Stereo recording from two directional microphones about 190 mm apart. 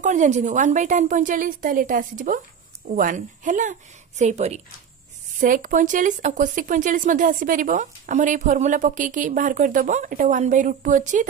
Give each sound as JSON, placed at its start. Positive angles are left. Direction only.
{"t": 0.0, "sound": "a woman's voice", "side_deg": -40}